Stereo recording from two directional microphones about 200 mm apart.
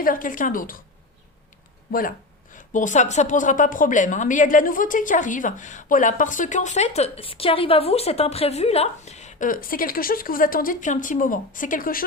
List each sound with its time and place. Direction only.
0.0 s a woman's voice: 45° left (ahead or behind)
1.9 s a woman's voice: 45° left (ahead or behind)